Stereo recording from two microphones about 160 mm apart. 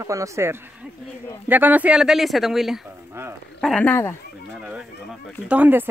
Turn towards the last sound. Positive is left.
turn(degrees=-10)  # may be behind; listen again after turning